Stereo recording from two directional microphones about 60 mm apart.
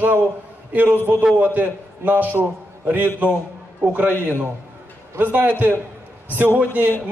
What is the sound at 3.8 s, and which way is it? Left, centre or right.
Speech, right.